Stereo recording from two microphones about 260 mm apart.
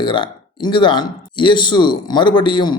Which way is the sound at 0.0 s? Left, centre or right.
Centre.